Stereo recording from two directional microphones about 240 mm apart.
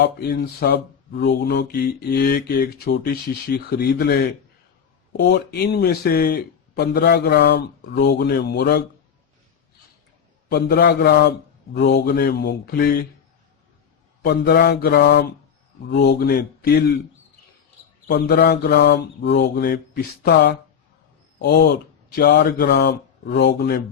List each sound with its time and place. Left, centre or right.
0.0 s speech: left
10.5 s speech: left
14.2 s speech: left
18.1 s speech: left